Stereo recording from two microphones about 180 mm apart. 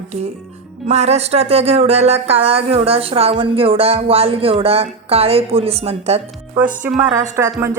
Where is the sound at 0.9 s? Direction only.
35° right (ahead or behind).